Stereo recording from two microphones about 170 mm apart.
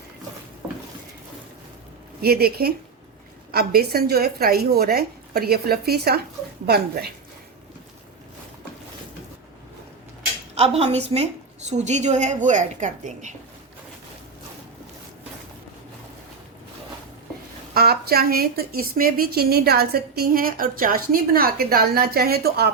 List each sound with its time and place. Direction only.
2.2 s a woman's voice: 65° right (ahead or behind)
10.5 s a woman's voice: 35° right (ahead or behind)
17.7 s a woman's voice: 65° right (ahead or behind)